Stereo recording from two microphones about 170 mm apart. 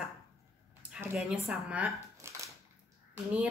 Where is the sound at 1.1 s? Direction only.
5° right (ahead or behind).